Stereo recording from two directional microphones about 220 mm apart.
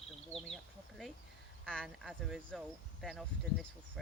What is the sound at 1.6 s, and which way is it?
Speech, 5° left (ahead or behind).